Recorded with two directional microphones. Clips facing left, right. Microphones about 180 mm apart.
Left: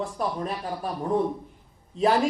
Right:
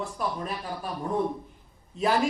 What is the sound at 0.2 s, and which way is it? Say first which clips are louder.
Speech: left 2 dB; 35° left (ahead or behind).